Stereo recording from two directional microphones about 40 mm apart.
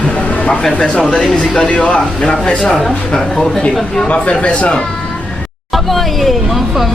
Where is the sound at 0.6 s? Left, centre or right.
Centre.